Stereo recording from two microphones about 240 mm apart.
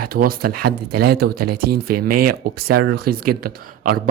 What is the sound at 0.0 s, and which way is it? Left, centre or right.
A man's voice, right.